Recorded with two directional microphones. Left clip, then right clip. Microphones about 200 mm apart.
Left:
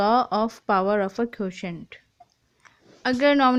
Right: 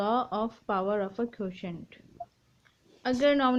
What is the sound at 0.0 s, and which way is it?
A woman's voice, 45° left (ahead or behind).